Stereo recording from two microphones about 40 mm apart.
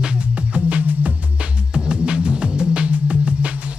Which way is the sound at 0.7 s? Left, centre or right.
Right.